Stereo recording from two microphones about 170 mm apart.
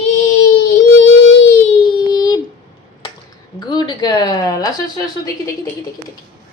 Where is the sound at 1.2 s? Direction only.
90° left.